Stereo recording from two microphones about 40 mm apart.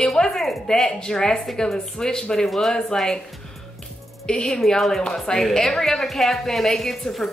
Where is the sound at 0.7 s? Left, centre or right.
Centre.